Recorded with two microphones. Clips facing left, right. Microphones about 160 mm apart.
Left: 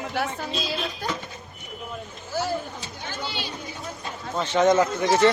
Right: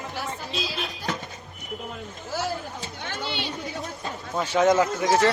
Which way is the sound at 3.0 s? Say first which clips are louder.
Right 1 dB; 70° right (ahead or behind).